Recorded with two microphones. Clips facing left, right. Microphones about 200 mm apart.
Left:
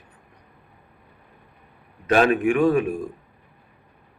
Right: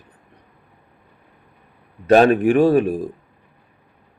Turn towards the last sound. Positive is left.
turn(degrees=-35)  # may be behind; listen again after turning